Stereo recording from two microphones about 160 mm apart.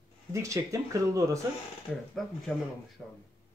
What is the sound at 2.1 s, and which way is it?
Speech, centre (ahead or behind).